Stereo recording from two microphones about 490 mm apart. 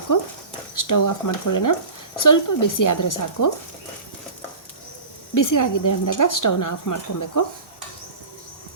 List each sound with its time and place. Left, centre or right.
0.8 s speech: left
5.3 s speech: left